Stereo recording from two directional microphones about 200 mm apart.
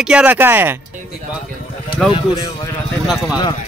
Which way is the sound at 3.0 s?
Centre (ahead or behind).